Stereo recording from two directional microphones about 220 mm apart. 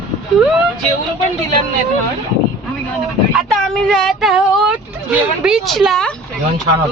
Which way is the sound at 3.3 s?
Centre (ahead or behind).